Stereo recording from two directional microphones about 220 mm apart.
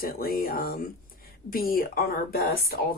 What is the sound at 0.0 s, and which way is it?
A woman's voice, 40° left (ahead or behind).